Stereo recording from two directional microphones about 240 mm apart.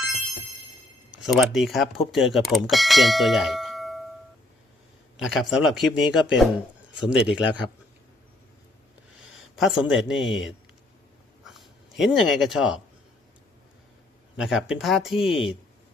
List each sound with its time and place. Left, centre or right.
1.1 s speech: centre
5.1 s speech: centre
9.6 s speech: centre
14.3 s speech: centre